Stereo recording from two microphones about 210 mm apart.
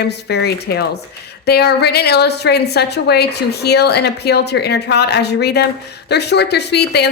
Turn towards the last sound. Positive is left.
turn(degrees=50)  # may be behind; listen again after turning